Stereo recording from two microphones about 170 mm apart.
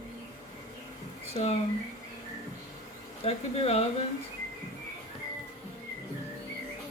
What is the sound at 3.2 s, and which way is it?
Speech, 35° left (ahead or behind).